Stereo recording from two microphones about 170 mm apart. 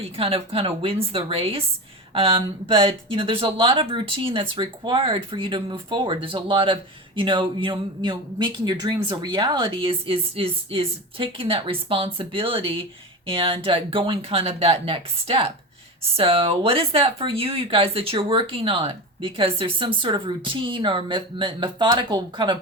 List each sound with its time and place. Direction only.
0.0 s speech: 35° right (ahead or behind)